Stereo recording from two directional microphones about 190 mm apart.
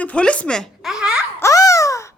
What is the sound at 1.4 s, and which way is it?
Speech, 15° left (ahead or behind).